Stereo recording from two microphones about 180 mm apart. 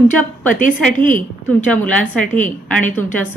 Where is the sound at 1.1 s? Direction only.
45° left (ahead or behind).